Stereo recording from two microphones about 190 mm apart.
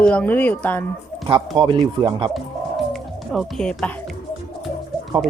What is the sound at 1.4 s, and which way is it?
Speech, 25° right (ahead or behind).